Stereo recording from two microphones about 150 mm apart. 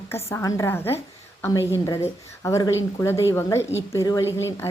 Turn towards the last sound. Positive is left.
turn(degrees=20)  # may be behind; listen again after turning